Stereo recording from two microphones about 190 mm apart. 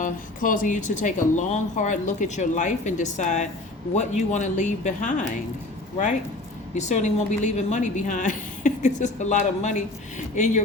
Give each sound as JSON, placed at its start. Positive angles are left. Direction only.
{"t": 0.0, "sound": "a woman's voice", "side_deg": 45}
{"t": 6.7, "sound": "a woman's voice", "side_deg": 40}